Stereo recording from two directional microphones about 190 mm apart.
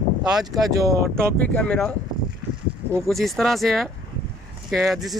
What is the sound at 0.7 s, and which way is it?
Speech, 15° right (ahead or behind).